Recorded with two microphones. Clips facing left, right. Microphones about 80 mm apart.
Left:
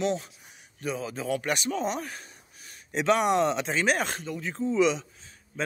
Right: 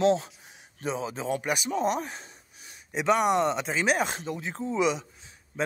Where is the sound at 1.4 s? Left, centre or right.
Centre.